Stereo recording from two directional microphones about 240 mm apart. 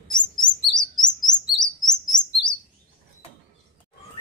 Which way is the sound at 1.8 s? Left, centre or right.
Centre.